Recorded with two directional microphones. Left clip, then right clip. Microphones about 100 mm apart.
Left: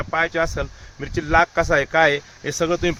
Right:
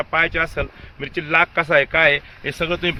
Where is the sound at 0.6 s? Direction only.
25° left (ahead or behind).